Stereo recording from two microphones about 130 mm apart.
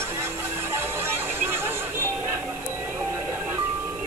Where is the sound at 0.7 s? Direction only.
15° right (ahead or behind).